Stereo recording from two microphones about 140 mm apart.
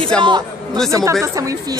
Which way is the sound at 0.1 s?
5° left (ahead or behind).